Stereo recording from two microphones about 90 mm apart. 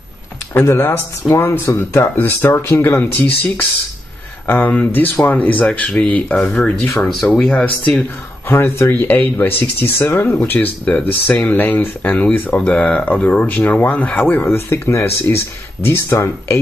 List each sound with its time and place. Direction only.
0.6 s speech: 25° left (ahead or behind)
3.1 s speech: 15° left (ahead or behind)
8.5 s speech: 25° left (ahead or behind)